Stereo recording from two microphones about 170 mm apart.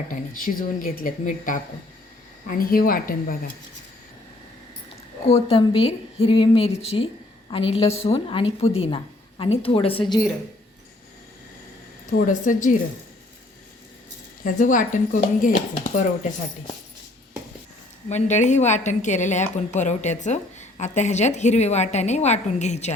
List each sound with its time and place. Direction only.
0.1 s speech: 55° left (ahead or behind)
5.3 s a woman's voice: 35° left (ahead or behind)
12.1 s a woman's voice: 50° left (ahead or behind)
14.4 s a woman's voice: 50° left (ahead or behind)
18.1 s a woman's voice: 45° left (ahead or behind)